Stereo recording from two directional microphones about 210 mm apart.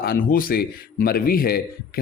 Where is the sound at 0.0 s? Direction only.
45° left (ahead or behind).